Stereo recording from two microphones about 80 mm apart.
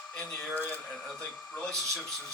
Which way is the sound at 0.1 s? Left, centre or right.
Centre.